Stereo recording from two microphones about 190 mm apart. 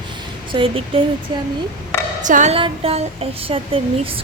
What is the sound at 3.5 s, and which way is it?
Speech, 30° right (ahead or behind).